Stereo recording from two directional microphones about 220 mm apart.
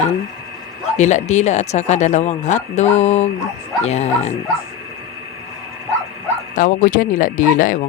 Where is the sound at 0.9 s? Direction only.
30° left (ahead or behind).